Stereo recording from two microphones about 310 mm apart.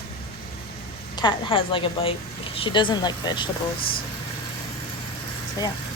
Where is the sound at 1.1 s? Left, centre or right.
Centre.